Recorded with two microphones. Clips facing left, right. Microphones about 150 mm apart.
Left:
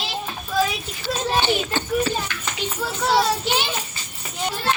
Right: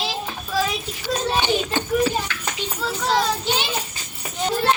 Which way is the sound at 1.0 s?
15° right (ahead or behind).